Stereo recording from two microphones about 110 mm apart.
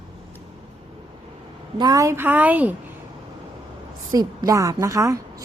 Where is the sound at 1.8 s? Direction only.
35° right (ahead or behind); by 2.7 s 15° right (ahead or behind).